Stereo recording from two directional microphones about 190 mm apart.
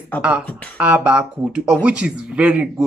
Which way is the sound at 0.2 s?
5° right (ahead or behind).